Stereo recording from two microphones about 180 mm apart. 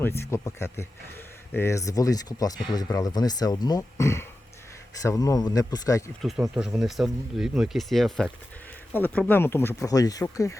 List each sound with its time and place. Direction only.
0.2 s speech: 15° left (ahead or behind)
6.2 s speech: centre (ahead or behind); by 10.6 s 15° left (ahead or behind)